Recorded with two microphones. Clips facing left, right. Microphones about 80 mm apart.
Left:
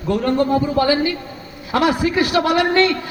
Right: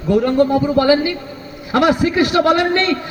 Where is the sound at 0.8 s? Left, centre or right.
Right.